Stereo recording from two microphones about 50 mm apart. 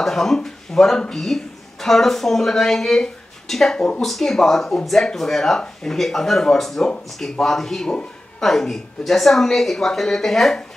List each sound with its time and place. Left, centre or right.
0.0 s speech: centre
3.7 s speech: centre
4.0 s a woman's voice: centre